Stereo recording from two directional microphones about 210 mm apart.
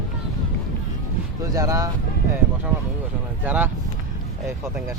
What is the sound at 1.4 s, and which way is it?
Speech, 15° right (ahead or behind).